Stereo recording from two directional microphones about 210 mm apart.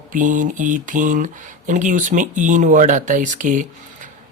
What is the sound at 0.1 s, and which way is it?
Speech, 40° right (ahead or behind).